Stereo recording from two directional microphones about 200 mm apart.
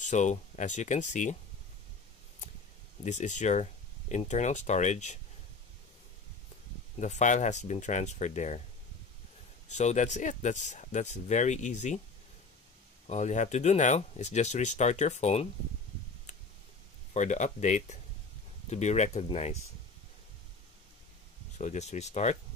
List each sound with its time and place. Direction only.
0.0 s speech: 35° left (ahead or behind)
3.0 s speech: 35° left (ahead or behind)
7.0 s speech: 35° left (ahead or behind)
9.7 s speech: 35° left (ahead or behind)
13.0 s speech: 35° left (ahead or behind)
17.1 s speech: 35° left (ahead or behind)
21.5 s speech: 35° left (ahead or behind)